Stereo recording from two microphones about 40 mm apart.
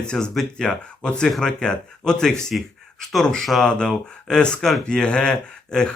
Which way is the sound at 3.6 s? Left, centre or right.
Left.